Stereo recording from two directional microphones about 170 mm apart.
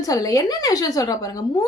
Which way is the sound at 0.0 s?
20° left (ahead or behind).